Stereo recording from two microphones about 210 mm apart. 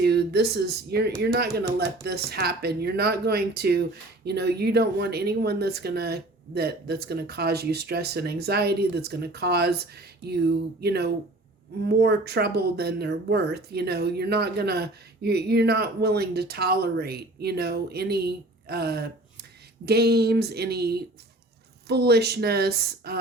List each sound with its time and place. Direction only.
0.0 s speech: 50° right (ahead or behind)